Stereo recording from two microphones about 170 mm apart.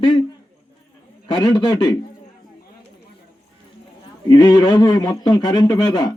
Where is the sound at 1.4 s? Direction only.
20° left (ahead or behind).